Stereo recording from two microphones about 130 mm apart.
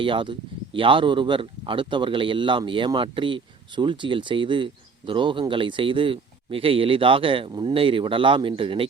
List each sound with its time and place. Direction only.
0.0 s speech: 40° right (ahead or behind)